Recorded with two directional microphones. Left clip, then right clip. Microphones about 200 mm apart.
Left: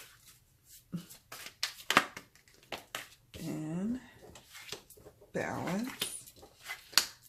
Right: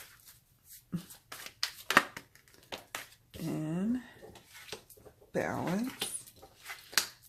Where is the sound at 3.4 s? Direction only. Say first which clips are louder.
Right 3 dB; 35° right (ahead or behind).